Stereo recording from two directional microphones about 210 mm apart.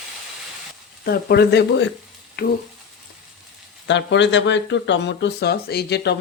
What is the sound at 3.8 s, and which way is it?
Speech, 60° left (ahead or behind).